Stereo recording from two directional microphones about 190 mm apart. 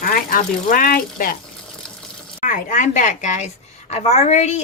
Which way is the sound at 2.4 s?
40° left (ahead or behind).